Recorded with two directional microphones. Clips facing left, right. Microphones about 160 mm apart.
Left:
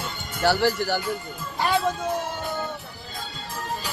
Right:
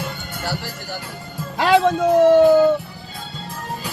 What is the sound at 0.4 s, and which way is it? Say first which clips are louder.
Speech: left 9 dB; 75° left (ahead or behind).